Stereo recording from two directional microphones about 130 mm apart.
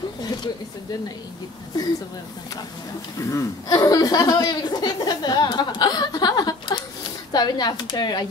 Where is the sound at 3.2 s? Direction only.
25° left (ahead or behind).